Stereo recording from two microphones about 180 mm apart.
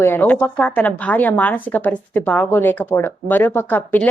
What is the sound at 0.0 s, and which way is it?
Speech, 10° left (ahead or behind).